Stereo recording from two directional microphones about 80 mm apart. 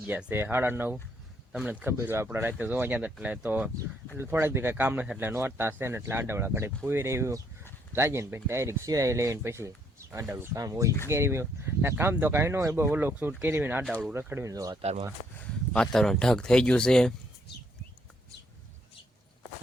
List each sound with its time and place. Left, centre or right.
0.0 s speech: centre
1.9 s speech: right; by 3.7 s centre
4.2 s speech: right
10.6 s speech: right
11.1 s speech: right
12.7 s speech: right
14.5 s speech: right
15.7 s speech: centre